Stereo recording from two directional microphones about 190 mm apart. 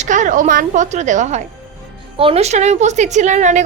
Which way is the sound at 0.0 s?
40° right (ahead or behind).